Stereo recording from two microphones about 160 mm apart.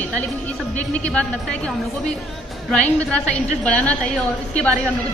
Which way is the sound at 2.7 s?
5° left (ahead or behind).